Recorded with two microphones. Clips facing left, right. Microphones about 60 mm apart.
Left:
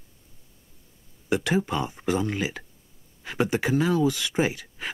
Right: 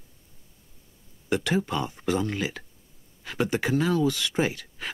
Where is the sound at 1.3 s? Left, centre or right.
Centre.